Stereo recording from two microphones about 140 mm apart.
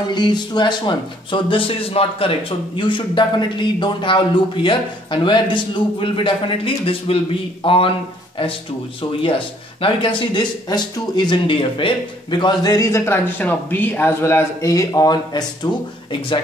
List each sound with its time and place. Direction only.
0.1 s speech: 30° left (ahead or behind)
9.2 s speech: 40° left (ahead or behind)